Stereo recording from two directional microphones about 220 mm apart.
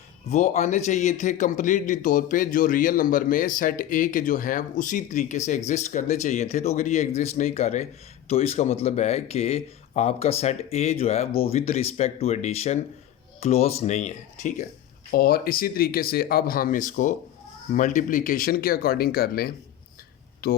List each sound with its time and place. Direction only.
0.3 s a man's voice: 30° left (ahead or behind)